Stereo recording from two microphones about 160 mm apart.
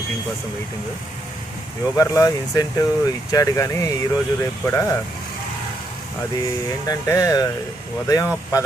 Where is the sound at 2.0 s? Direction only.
20° left (ahead or behind).